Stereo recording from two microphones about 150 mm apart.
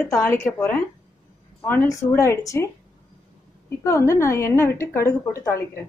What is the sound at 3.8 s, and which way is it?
A woman's voice, 20° left (ahead or behind).